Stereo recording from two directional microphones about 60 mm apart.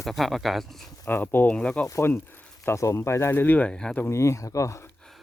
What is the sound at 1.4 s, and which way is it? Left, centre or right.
Speech, centre.